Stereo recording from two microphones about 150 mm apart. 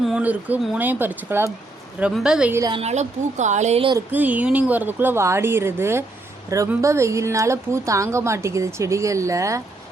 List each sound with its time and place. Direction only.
0.0 s speech: 5° right (ahead or behind)
2.6 s a woman's voice: 25° right (ahead or behind)
2.8 s speech: 50° right (ahead or behind)
4.1 s a woman's voice: 10° right (ahead or behind)